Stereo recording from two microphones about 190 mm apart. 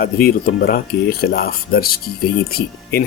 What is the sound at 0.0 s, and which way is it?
Speech, 55° left (ahead or behind).